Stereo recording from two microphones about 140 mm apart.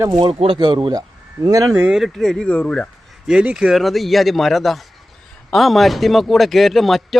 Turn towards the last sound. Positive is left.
turn(degrees=0)  # may be behind; listen again after turning